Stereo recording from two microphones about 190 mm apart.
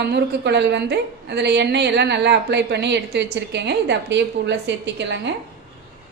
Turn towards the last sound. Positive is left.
turn(degrees=-65)  # may be behind; listen again after turning